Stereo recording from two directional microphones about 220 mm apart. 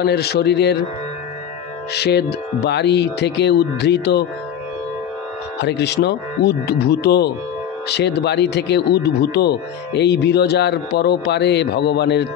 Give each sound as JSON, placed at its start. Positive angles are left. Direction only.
{"t": 0.0, "sound": "speech", "side_deg": 45}
{"t": 2.0, "sound": "speech", "side_deg": 50}
{"t": 5.6, "sound": "speech", "side_deg": 50}